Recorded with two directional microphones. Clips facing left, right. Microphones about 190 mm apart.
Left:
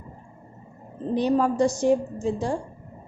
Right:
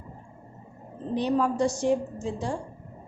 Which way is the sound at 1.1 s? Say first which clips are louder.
Left 3 dB; 45° left (ahead or behind).